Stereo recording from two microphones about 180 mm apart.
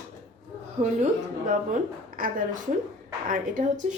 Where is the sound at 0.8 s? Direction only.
45° right (ahead or behind).